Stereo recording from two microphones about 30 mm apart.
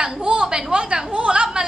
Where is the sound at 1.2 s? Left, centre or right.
Right.